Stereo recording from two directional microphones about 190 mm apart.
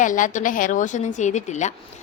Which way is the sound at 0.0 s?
45° left (ahead or behind).